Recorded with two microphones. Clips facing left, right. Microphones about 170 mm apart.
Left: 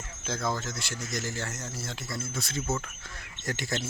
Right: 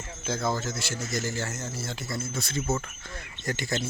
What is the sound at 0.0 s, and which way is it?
Speech, centre (ahead or behind).